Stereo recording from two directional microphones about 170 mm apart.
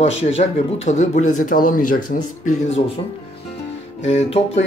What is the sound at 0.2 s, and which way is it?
Speech, 35° left (ahead or behind).